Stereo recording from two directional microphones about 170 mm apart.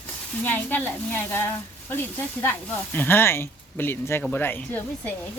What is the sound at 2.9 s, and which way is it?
Speech, 10° left (ahead or behind).